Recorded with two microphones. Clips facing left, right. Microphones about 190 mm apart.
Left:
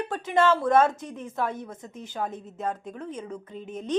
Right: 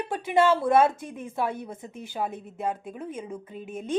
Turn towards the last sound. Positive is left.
turn(degrees=-10)  # may be behind; listen again after turning